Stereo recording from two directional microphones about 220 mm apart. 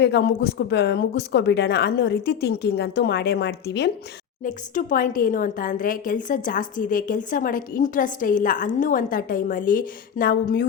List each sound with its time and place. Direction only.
0.0 s a woman's voice: 50° left (ahead or behind)
4.4 s a woman's voice: 40° left (ahead or behind)